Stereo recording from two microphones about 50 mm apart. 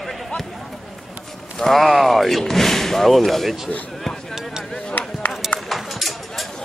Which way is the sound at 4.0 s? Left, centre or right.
Centre.